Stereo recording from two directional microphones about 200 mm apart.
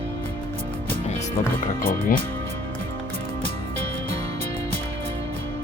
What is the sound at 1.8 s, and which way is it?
Speech, 45° left (ahead or behind).